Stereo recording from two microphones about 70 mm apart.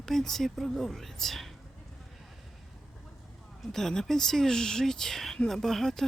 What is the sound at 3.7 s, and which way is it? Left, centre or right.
Speech, centre.